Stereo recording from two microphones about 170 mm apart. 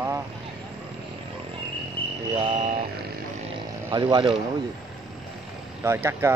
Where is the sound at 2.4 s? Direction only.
30° right (ahead or behind).